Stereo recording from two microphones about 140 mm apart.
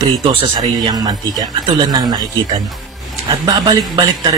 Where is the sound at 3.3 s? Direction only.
35° right (ahead or behind).